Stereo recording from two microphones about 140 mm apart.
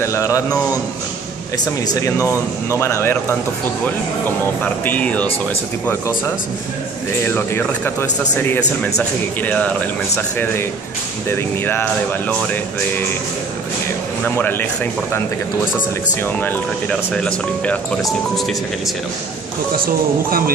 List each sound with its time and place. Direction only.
0.0 s speech: 20° left (ahead or behind)
2.0 s speech: 20° left (ahead or behind)
4.6 s speech: 10° left (ahead or behind)
14.2 s speech: 15° left (ahead or behind)
19.8 s speech: 90° right